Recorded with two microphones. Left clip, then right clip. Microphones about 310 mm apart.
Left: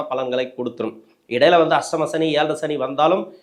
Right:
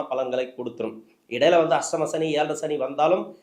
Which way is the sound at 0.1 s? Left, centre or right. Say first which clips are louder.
Left 3 dB; left.